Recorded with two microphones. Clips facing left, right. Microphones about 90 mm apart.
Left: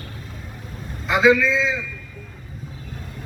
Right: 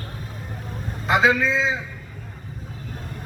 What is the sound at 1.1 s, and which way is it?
Speech, 45° right (ahead or behind).